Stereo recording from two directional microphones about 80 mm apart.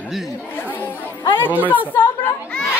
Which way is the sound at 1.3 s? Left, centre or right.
Left.